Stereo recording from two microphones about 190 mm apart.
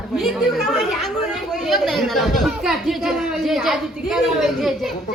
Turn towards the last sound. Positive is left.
turn(degrees=0)  # may be behind; listen again after turning